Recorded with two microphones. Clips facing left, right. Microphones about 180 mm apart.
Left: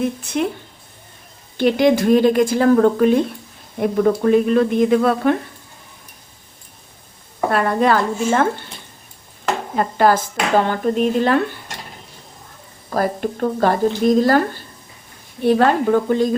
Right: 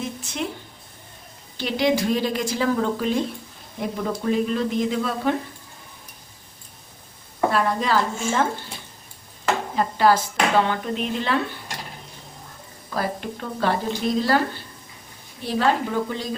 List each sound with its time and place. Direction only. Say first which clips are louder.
0.0 s speech: left 9 dB; 60° left (ahead or behind)
1.5 s speech: left 7 dB; 55° left (ahead or behind)
7.5 s speech: left 7 dB; 55° left (ahead or behind)
9.7 s speech: left 4 dB; 50° left (ahead or behind)
12.9 s speech: left 7 dB; 45° left (ahead or behind)
15.4 s speech: left 8 dB; 55° left (ahead or behind)